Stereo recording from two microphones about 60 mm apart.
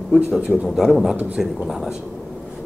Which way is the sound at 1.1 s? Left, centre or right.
Right.